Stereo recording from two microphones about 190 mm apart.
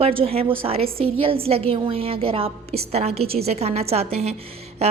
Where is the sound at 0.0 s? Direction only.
30° right (ahead or behind).